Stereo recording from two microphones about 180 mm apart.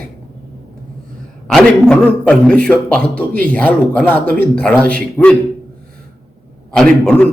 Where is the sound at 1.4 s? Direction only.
5° left (ahead or behind).